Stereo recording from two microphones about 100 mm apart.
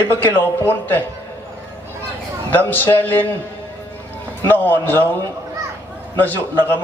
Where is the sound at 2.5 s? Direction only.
20° left (ahead or behind).